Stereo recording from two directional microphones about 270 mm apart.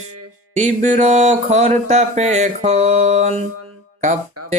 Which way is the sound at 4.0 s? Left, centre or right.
Right.